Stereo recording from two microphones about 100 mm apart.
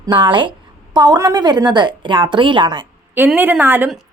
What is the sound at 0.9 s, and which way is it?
A woman's voice, 40° right (ahead or behind).